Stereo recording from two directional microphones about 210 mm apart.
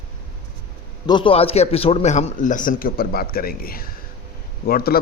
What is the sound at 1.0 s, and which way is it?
A man's voice, 25° left (ahead or behind).